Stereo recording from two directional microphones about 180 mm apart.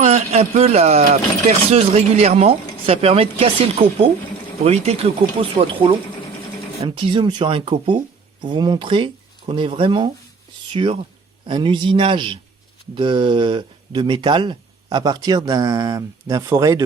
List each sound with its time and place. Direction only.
0.0 s speech: 35° right (ahead or behind); by 16.8 s 20° right (ahead or behind)